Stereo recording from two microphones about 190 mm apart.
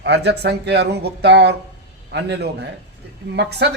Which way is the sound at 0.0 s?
60° right (ahead or behind).